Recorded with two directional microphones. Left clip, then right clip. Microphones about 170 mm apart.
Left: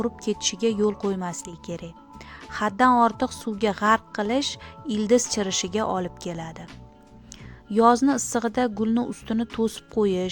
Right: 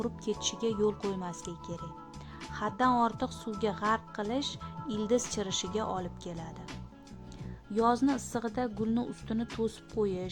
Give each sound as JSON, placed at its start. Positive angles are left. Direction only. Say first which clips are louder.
{"t": 0.0, "sound": "a woman's voice", "louder": "left 7 dB", "side_deg": 30}
{"t": 7.7, "sound": "a woman's voice", "louder": "left 9 dB", "side_deg": 30}